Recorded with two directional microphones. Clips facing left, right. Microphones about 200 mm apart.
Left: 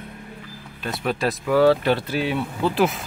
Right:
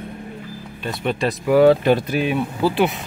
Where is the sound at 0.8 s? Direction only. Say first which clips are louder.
Right 2 dB; centre (ahead or behind).